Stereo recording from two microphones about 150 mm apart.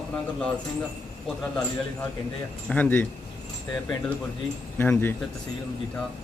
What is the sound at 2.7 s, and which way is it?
Speech, 10° left (ahead or behind).